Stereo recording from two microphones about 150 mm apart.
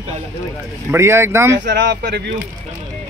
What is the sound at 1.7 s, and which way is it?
Speech, 90° right.